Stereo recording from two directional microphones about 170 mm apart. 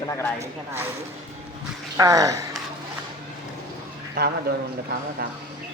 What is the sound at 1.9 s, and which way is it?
Speech, 20° right (ahead or behind).